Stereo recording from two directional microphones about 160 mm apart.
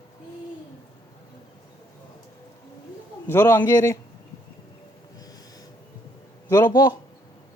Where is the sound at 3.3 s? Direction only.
15° left (ahead or behind).